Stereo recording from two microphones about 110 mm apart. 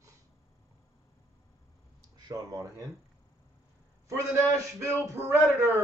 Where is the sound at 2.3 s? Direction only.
30° right (ahead or behind).